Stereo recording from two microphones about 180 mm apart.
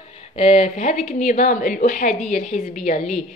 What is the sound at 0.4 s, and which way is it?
A woman's voice, 35° left (ahead or behind).